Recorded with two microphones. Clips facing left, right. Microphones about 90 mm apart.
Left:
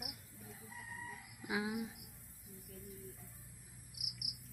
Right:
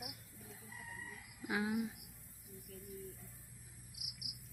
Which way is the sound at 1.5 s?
10° left (ahead or behind).